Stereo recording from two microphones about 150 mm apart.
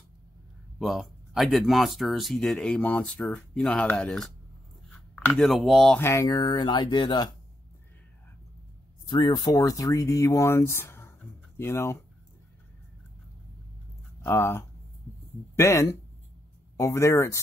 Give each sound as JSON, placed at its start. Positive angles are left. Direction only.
{"t": 0.7, "sound": "speech", "side_deg": 0}
{"t": 5.3, "sound": "speech", "side_deg": 0}
{"t": 5.9, "sound": "speech", "side_deg": 20}
{"t": 9.0, "sound": "speech", "side_deg": 30}
{"t": 14.2, "sound": "speech", "side_deg": 15}